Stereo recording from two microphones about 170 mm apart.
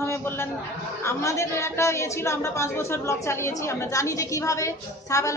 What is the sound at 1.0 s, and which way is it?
Speech, 15° left (ahead or behind).